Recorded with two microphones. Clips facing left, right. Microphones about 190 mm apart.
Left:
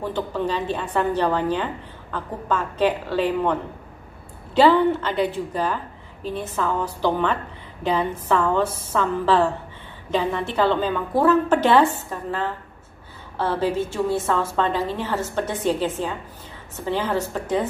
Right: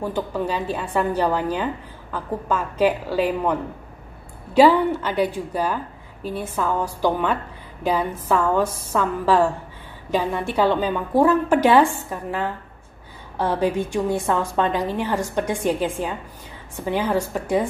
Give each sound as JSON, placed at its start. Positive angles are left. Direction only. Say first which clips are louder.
{"t": 0.0, "sound": "a woman's voice", "louder": "even", "side_deg": -10}
{"t": 4.6, "sound": "a woman's voice", "louder": "right 1 dB", "side_deg": -10}